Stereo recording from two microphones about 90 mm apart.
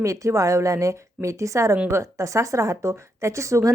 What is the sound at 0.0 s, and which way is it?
A woman's voice, 35° right (ahead or behind).